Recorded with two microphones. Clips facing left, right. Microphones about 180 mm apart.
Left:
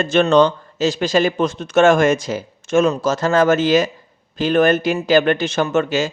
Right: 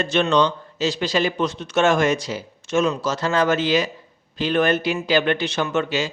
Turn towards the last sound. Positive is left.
turn(degrees=45)  # may be behind; listen again after turning